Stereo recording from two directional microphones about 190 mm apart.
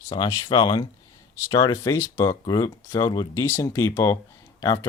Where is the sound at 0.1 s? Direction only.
25° left (ahead or behind).